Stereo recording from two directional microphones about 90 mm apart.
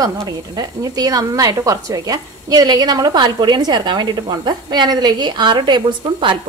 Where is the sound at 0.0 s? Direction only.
40° right (ahead or behind).